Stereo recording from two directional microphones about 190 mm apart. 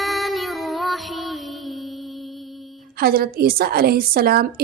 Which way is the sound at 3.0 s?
50° right (ahead or behind).